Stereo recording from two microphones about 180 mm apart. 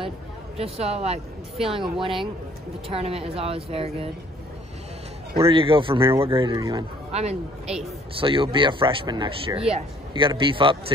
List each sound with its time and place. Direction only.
0.6 s speech: 35° right (ahead or behind)
2.9 s speech: 35° right (ahead or behind)
5.5 s speech: 30° right (ahead or behind)